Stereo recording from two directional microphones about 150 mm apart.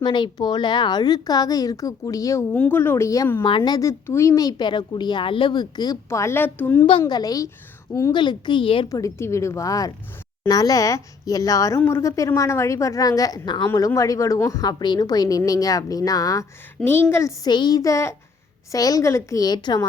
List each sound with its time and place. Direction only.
0.0 s a woman's voice: 30° left (ahead or behind)
2.5 s a woman's voice: 10° left (ahead or behind)
3.4 s a woman's voice: 30° left (ahead or behind); by 6.8 s 10° left (ahead or behind)
7.0 s a woman's voice: 25° left (ahead or behind)
8.9 s a woman's voice: 20° left (ahead or behind)